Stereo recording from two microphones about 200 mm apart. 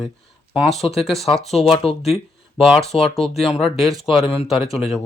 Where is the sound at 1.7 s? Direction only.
30° left (ahead or behind).